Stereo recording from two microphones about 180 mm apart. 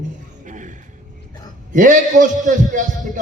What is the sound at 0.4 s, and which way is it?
Music, 45° right (ahead or behind).